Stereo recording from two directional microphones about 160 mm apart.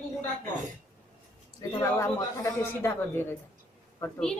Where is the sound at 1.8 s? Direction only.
20° left (ahead or behind).